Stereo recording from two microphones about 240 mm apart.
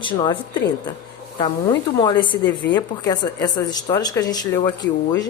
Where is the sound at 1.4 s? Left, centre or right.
Centre.